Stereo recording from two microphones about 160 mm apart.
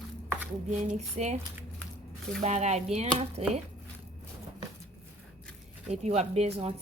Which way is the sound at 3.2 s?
40° right (ahead or behind).